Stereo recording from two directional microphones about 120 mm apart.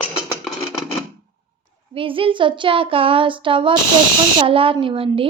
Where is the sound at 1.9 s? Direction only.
45° right (ahead or behind).